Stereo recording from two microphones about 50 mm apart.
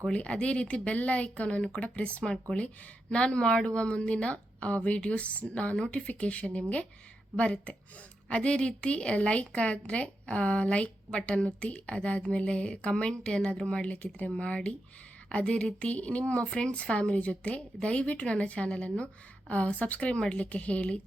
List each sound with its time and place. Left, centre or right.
0.1 s speech: left